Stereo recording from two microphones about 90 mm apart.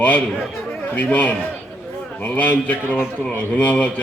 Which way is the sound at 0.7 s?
20° left (ahead or behind).